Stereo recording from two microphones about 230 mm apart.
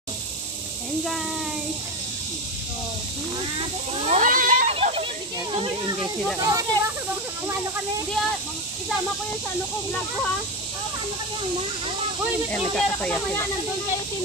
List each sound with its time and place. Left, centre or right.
4.0 s a sound: right
5.5 s children playing: right
6.4 s speech: centre
12.4 s speech: centre